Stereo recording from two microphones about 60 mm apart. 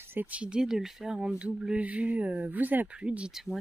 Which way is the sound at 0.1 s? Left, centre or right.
Right.